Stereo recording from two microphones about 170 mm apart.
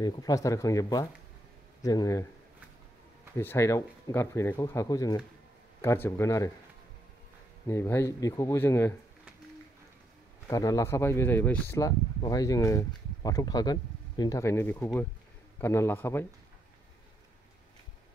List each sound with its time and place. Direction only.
0.0 s speech: 20° left (ahead or behind)
3.3 s speech: 15° left (ahead or behind)
7.6 s speech: 15° left (ahead or behind)
10.5 s speech: 20° left (ahead or behind)